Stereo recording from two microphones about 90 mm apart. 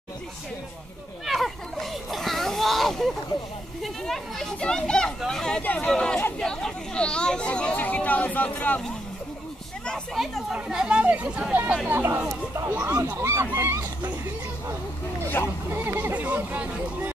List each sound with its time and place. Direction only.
1.2 s a sound: centre (ahead or behind)
3.8 s speech: 5° left (ahead or behind)
5.6 s speech: 20° left (ahead or behind)
10.1 s speech: centre (ahead or behind)
11.9 s speech: 25° right (ahead or behind)
15.2 s speech: 20° left (ahead or behind)
15.7 s speech: 25° right (ahead or behind)